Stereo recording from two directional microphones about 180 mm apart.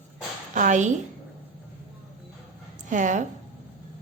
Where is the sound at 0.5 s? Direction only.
45° right (ahead or behind).